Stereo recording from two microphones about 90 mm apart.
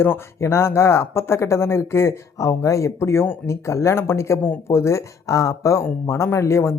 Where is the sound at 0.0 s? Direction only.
30° left (ahead or behind).